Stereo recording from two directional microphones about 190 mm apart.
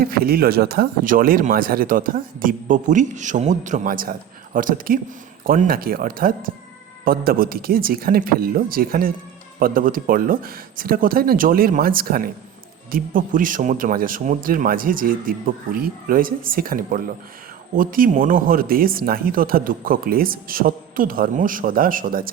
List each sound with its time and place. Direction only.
0.0 s speech: 50° right (ahead or behind)